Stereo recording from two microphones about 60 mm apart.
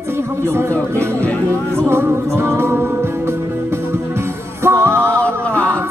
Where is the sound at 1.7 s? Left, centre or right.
Right.